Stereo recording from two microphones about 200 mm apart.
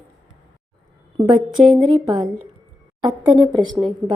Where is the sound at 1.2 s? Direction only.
20° right (ahead or behind).